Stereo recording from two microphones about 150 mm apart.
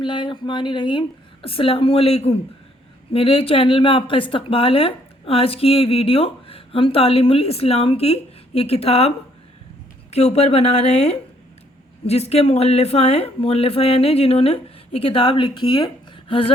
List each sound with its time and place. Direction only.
0.0 s a woman's voice: 35° left (ahead or behind)